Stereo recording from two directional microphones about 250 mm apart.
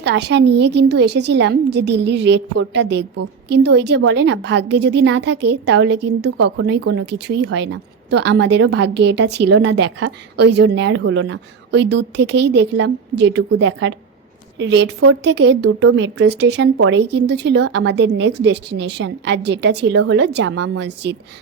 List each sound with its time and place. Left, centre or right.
0.0 s a woman's voice: right